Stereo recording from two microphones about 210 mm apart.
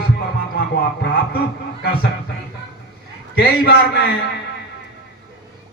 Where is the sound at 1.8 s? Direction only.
45° left (ahead or behind).